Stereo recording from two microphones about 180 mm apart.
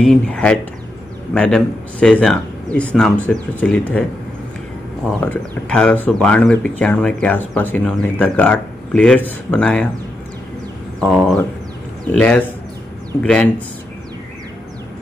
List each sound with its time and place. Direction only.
0.0 s speech: 5° left (ahead or behind)
5.2 s speech: 10° left (ahead or behind)
11.0 s speech: 5° left (ahead or behind)